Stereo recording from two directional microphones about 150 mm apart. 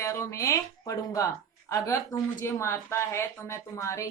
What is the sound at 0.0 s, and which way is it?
A woman's voice, 20° left (ahead or behind).